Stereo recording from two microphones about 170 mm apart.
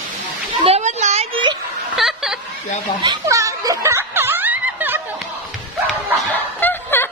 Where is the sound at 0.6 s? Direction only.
40° right (ahead or behind).